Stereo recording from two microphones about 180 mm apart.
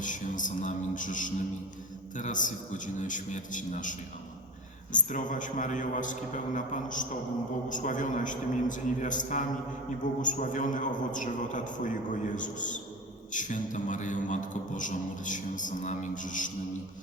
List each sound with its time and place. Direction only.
0.0 s a man's voice: 45° left (ahead or behind)